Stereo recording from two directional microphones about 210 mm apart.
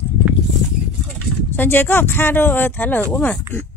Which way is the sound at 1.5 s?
10° left (ahead or behind).